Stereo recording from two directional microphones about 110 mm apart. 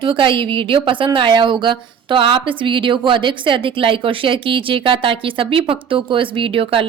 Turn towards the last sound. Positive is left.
turn(degrees=-55)  # may be behind; listen again after turning